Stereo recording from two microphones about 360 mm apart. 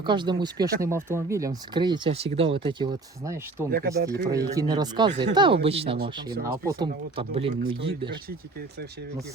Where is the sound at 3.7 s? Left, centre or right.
Right.